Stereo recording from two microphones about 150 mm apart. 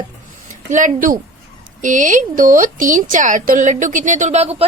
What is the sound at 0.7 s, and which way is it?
Speech, 55° right (ahead or behind).